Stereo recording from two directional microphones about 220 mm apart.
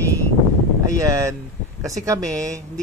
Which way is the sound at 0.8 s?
15° right (ahead or behind).